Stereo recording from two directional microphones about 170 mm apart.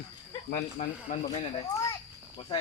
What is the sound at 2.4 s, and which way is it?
Speech, 30° left (ahead or behind).